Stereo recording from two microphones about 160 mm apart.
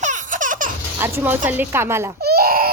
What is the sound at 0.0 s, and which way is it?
Baby laughter, 50° right (ahead or behind).